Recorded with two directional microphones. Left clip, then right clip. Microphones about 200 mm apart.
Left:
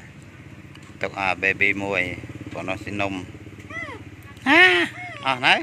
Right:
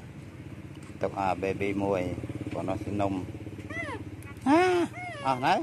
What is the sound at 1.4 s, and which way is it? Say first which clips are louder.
Speech: left 9 dB; 5° right (ahead or behind).